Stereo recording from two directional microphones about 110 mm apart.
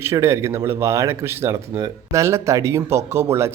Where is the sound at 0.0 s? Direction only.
25° right (ahead or behind).